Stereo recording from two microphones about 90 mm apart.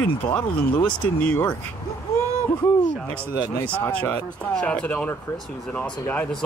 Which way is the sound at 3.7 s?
15° left (ahead or behind).